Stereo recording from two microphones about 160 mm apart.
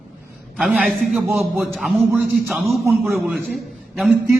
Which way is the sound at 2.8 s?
15° right (ahead or behind).